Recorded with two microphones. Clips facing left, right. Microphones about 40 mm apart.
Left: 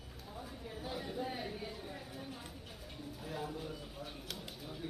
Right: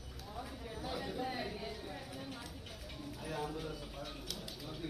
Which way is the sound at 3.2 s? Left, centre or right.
Right.